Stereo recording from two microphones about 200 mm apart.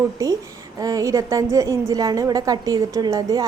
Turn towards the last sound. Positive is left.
turn(degrees=-15)  # may be behind; listen again after turning